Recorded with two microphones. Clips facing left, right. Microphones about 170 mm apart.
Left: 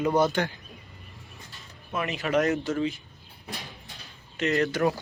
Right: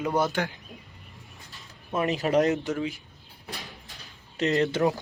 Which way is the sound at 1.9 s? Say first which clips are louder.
Right 3 dB; 35° right (ahead or behind).